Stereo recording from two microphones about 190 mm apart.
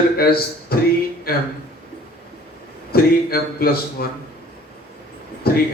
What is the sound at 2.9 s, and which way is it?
Speech, 50° left (ahead or behind).